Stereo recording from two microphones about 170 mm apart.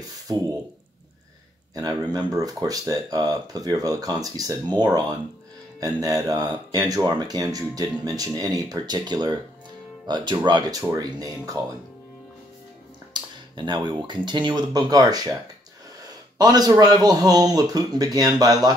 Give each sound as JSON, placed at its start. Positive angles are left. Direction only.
{"t": 0.3, "sound": "speech", "side_deg": -25}
{"t": 1.8, "sound": "speech", "side_deg": -25}
{"t": 13.1, "sound": "speech", "side_deg": -25}